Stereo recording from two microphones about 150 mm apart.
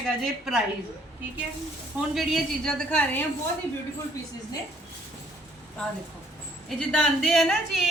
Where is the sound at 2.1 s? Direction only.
Centre (ahead or behind).